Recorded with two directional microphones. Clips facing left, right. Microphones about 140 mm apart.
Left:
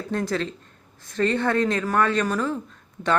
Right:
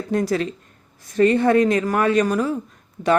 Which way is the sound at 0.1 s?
15° right (ahead or behind).